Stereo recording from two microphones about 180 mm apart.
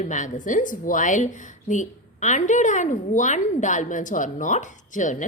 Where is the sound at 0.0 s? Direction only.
45° left (ahead or behind).